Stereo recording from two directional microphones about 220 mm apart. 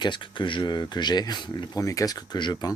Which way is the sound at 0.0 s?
20° left (ahead or behind).